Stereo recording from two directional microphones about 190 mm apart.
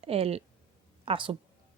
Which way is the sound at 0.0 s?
30° right (ahead or behind).